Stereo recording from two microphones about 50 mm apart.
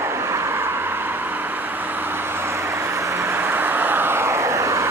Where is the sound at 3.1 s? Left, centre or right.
Right.